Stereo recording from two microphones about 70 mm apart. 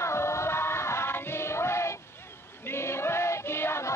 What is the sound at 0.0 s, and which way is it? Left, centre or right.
Music, left.